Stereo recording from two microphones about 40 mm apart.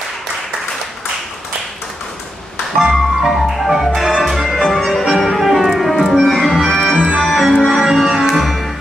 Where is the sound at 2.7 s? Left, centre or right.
Centre.